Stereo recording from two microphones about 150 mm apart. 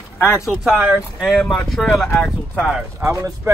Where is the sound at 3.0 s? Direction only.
20° right (ahead or behind).